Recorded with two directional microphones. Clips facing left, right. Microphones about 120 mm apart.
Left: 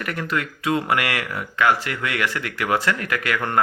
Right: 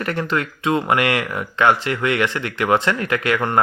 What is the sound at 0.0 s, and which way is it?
Speech, 30° right (ahead or behind).